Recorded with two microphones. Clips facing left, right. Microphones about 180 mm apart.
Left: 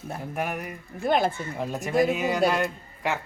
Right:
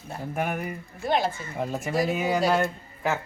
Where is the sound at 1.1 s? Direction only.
50° left (ahead or behind).